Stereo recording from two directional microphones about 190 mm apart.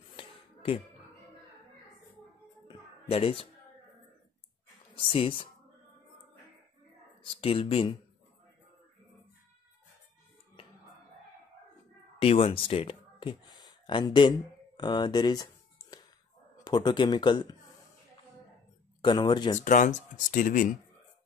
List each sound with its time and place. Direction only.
0.1 s a sound: 30° left (ahead or behind)
2.7 s a sound: 30° left (ahead or behind)
4.9 s speech: 30° left (ahead or behind)
7.3 s speech: 30° left (ahead or behind)
12.2 s speech: 30° left (ahead or behind)
18.9 s speech: 25° left (ahead or behind)
19.6 s speech: 40° left (ahead or behind)